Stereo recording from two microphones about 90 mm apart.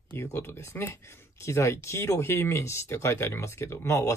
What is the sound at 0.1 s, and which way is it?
Speech, 25° left (ahead or behind).